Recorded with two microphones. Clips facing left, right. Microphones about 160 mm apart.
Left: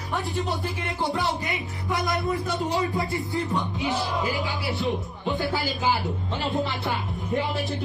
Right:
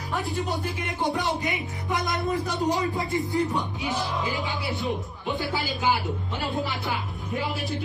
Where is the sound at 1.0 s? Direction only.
20° right (ahead or behind).